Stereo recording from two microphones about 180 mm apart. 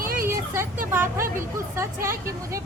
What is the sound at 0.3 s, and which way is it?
Vehicle, 15° right (ahead or behind).